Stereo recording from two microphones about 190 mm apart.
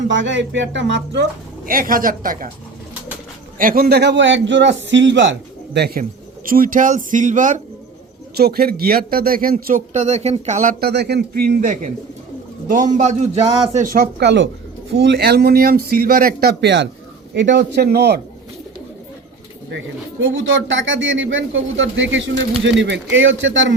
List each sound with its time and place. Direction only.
0.1 s a man's voice: 75° right (ahead or behind); by 2.5 s 45° right (ahead or behind)
3.6 s a man's voice: 50° right (ahead or behind)
8.4 s a man's voice: 55° right (ahead or behind); by 13.5 s 35° right (ahead or behind)
13.7 s a man's voice: 45° right (ahead or behind)
20.2 s a man's voice: 90° right